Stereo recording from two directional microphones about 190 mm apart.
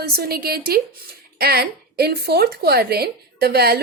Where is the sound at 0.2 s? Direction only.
55° right (ahead or behind).